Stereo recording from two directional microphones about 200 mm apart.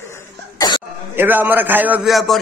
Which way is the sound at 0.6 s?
20° left (ahead or behind).